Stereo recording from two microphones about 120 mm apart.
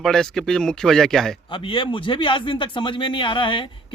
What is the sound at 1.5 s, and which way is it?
Speech, 45° left (ahead or behind).